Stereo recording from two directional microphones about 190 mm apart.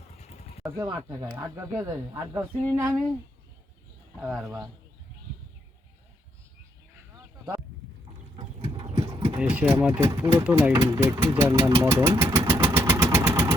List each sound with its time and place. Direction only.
0.2 s vehicle: 35° left (ahead or behind)
0.6 s speech: 20° right (ahead or behind)
4.2 s a man's voice: 5° right (ahead or behind)
4.4 s speech: 20° right (ahead or behind)
7.2 s a sound: 15° right (ahead or behind)
8.7 s horse: 30° right (ahead or behind)
9.0 s a sound: 25° right (ahead or behind)
9.3 s speech: 5° right (ahead or behind)
11.8 s vehicle: 15° right (ahead or behind)